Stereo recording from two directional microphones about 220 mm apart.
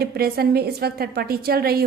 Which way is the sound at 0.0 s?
45° right (ahead or behind).